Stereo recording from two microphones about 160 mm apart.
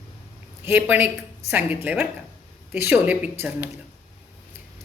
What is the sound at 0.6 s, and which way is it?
A woman's voice, 10° right (ahead or behind).